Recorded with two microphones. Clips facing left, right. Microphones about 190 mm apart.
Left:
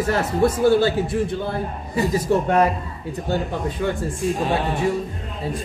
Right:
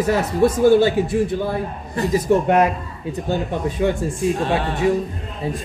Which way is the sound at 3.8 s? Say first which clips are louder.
Right 5 dB; 20° right (ahead or behind).